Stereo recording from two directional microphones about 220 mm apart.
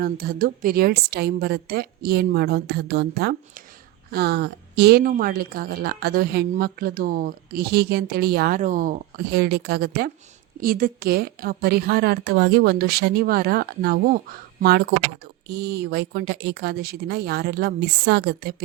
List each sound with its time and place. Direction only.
0.0 s a woman's voice: 40° right (ahead or behind)